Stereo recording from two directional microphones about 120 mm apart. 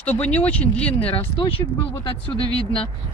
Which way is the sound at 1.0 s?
50° left (ahead or behind).